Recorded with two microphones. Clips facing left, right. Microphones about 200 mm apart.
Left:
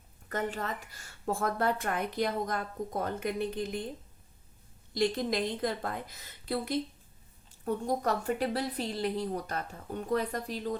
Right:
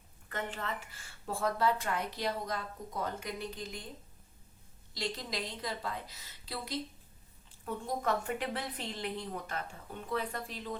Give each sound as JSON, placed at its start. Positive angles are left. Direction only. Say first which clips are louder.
{"t": 0.3, "sound": "a woman's voice", "louder": "left 5 dB", "side_deg": 40}
{"t": 4.9, "sound": "a woman's voice", "louder": "left 9 dB", "side_deg": 50}
{"t": 7.6, "sound": "a woman's voice", "louder": "left 5 dB", "side_deg": 40}